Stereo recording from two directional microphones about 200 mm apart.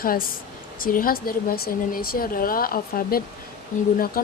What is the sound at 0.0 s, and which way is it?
Speech, 45° left (ahead or behind).